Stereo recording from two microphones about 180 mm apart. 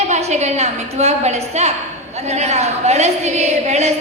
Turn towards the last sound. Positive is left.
turn(degrees=-35)  # may be behind; listen again after turning